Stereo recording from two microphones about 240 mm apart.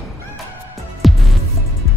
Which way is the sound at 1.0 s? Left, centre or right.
Centre.